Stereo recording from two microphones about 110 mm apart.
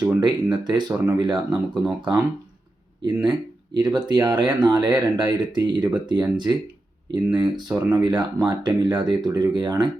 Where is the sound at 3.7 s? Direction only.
45° right (ahead or behind).